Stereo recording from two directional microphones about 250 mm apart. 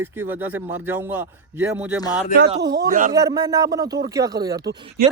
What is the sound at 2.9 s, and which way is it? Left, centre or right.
Speech, right.